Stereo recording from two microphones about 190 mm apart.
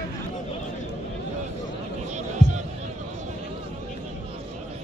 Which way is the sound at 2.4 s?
40° right (ahead or behind).